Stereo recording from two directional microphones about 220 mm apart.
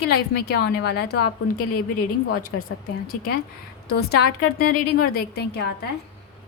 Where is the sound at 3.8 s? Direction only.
45° left (ahead or behind).